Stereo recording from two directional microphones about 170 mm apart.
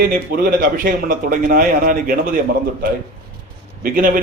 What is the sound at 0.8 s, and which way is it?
A man's voice, 55° right (ahead or behind).